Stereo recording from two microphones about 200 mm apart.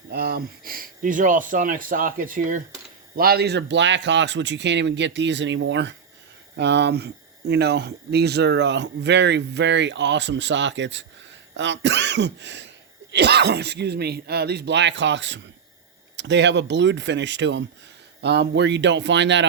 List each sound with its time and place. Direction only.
0.1 s speech: 50° right (ahead or behind)